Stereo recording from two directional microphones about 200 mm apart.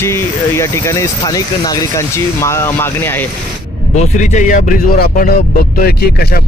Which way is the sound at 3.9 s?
40° left (ahead or behind).